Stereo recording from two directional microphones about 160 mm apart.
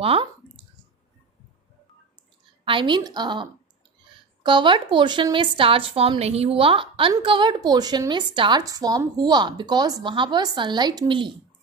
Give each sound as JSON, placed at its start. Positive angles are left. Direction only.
{"t": 0.0, "sound": "speech", "side_deg": -35}
{"t": 2.6, "sound": "speech", "side_deg": -30}